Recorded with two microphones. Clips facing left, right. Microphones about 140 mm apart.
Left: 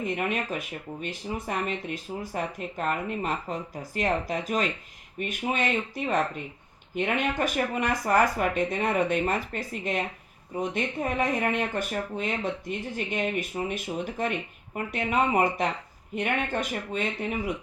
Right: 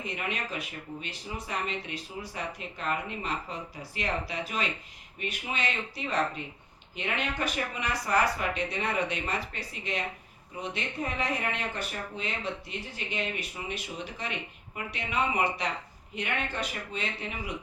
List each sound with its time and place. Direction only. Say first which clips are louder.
0.0 s speech: left 6 dB; 50° left (ahead or behind)